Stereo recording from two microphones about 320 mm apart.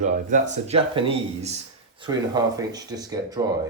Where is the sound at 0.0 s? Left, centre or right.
Right.